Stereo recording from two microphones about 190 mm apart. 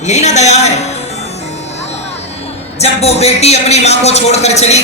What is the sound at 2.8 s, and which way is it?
A man's voice, 35° left (ahead or behind).